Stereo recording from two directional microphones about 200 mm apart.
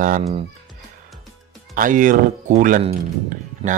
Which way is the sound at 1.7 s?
40° right (ahead or behind).